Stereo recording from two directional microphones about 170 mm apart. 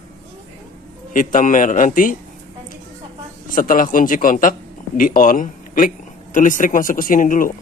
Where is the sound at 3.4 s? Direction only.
55° left (ahead or behind).